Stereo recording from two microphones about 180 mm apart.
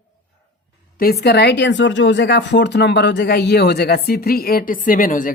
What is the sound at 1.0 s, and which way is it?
Speech, 60° left (ahead or behind).